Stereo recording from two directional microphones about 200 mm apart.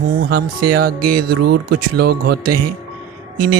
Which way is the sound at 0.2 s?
50° right (ahead or behind).